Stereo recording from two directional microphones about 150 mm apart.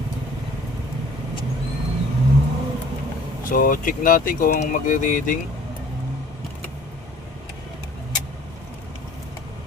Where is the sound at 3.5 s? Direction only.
65° left (ahead or behind).